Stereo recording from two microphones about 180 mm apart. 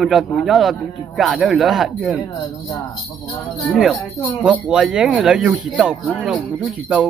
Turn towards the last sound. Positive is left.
turn(degrees=-5)  # may be behind; listen again after turning